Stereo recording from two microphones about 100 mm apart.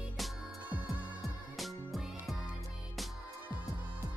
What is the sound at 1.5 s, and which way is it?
Music, centre (ahead or behind).